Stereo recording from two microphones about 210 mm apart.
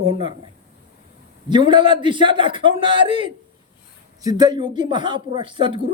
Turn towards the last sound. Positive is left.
turn(degrees=-25)  # may be behind; listen again after turning